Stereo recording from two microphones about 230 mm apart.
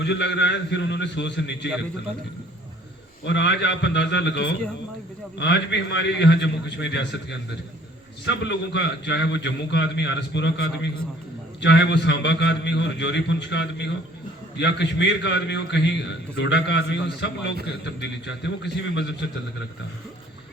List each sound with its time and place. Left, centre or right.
0.0 s a man's voice: left
3.2 s a man's voice: left